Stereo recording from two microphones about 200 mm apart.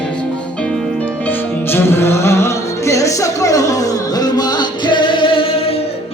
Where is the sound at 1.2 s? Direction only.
10° left (ahead or behind); by 5.7 s 30° left (ahead or behind).